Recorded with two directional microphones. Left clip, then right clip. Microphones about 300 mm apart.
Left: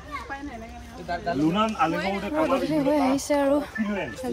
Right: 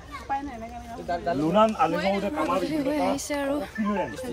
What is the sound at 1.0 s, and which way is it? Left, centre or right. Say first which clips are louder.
Speech: left 1 dB; right.